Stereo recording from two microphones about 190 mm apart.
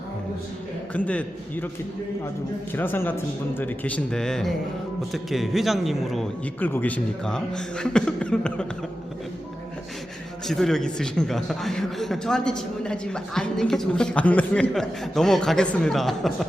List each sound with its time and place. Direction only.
0.9 s a man's voice: 5° left (ahead or behind)
2.7 s a man's voice: 10° left (ahead or behind)
10.4 s a man's voice: centre (ahead or behind)